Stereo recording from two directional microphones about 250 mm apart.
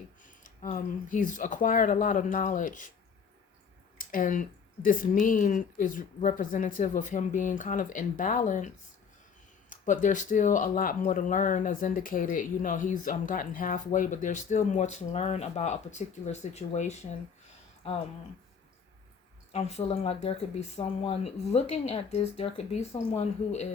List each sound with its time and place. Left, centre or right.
0.4 s speech: left
3.9 s speech: left
19.5 s speech: left